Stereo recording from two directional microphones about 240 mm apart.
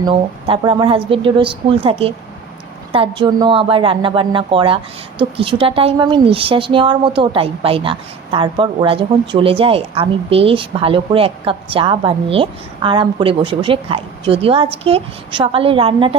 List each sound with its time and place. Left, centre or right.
0.0 s a woman's voice: right